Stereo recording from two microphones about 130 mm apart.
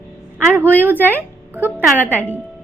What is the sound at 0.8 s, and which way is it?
Speech, 15° right (ahead or behind).